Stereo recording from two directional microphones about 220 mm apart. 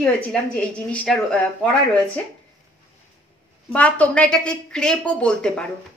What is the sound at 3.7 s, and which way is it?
Speech, 5° left (ahead or behind).